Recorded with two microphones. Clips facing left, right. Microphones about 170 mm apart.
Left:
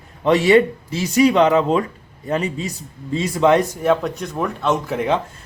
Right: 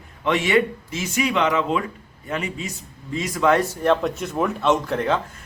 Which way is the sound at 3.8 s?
5° left (ahead or behind).